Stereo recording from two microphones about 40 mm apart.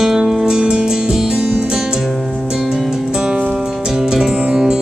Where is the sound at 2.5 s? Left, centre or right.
Centre.